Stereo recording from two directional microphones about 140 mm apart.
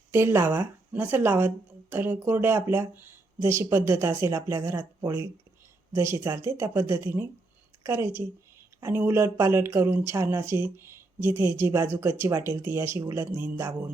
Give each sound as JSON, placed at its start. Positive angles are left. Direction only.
{"t": 0.1, "sound": "speech", "side_deg": -15}